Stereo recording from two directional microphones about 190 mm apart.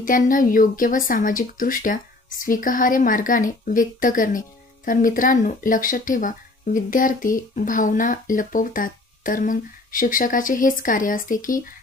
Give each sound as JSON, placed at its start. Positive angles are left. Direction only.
{"t": 0.0, "sound": "speech", "side_deg": 45}